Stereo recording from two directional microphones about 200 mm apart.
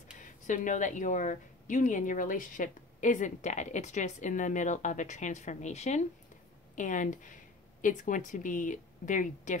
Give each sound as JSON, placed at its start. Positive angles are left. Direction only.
{"t": 0.2, "sound": "speech", "side_deg": 40}